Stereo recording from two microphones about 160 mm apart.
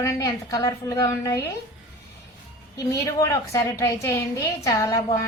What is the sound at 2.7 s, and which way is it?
A woman's voice, 20° left (ahead or behind).